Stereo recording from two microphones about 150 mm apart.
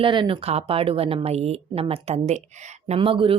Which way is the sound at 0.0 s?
35° right (ahead or behind).